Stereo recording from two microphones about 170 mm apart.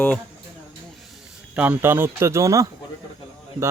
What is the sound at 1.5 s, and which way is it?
Speech, 10° right (ahead or behind).